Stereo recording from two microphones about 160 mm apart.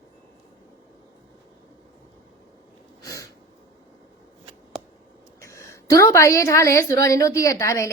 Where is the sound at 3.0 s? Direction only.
20° left (ahead or behind).